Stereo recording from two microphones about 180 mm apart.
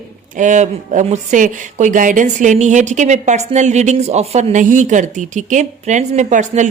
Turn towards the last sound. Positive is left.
turn(degrees=-40)  # may be behind; listen again after turning